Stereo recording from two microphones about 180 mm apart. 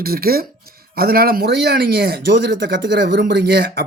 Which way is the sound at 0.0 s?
55° right (ahead or behind).